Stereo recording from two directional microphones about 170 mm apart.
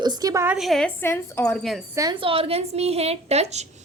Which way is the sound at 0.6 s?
Centre (ahead or behind).